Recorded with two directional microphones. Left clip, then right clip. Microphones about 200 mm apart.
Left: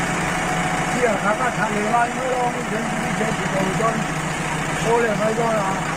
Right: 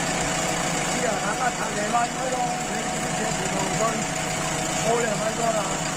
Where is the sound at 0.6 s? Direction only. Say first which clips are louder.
Left 4 dB; 15° right (ahead or behind).